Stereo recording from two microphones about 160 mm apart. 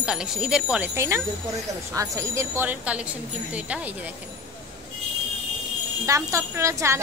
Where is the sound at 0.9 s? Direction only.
15° right (ahead or behind).